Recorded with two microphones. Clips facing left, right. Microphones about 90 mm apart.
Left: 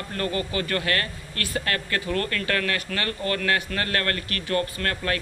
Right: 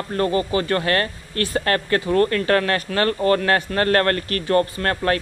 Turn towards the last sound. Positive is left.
turn(degrees=-30)  # may be behind; listen again after turning